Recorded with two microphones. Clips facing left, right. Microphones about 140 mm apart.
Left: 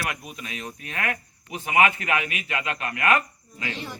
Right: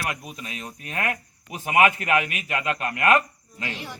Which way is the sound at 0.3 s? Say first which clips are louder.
Left 1 dB; 35° right (ahead or behind).